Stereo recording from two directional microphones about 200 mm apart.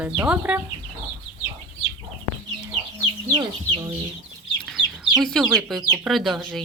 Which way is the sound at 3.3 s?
15° right (ahead or behind).